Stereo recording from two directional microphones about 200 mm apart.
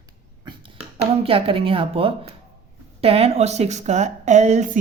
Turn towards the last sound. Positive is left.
turn(degrees=-35)  # may be behind; listen again after turning